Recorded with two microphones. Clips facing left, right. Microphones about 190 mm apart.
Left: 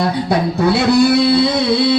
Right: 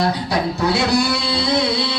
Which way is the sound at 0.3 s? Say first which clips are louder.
Left 5 dB; 55° left (ahead or behind).